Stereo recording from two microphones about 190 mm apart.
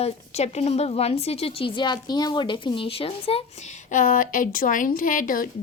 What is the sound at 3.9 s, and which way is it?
Speech, 45° left (ahead or behind).